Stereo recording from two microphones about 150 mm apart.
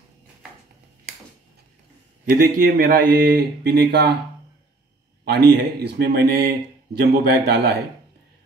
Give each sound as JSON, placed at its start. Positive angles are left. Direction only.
{"t": 2.2, "sound": "speech", "side_deg": -70}
{"t": 5.2, "sound": "a man's voice", "side_deg": -90}